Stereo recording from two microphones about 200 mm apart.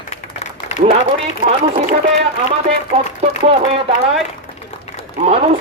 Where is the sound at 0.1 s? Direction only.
35° left (ahead or behind).